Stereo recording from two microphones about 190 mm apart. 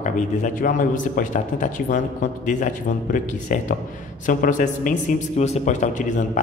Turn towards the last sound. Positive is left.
turn(degrees=40)  # may be behind; listen again after turning